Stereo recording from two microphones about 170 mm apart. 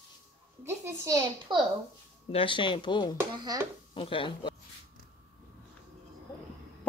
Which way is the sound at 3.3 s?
25° right (ahead or behind).